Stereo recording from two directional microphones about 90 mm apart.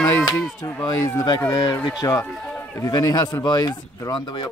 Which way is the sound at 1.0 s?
45° left (ahead or behind).